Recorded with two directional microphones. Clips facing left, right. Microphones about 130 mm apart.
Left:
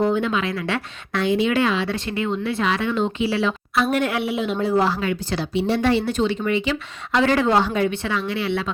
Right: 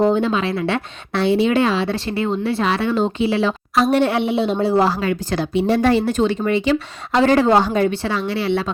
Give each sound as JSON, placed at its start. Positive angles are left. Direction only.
{"t": 0.0, "sound": "a woman's voice", "side_deg": -30}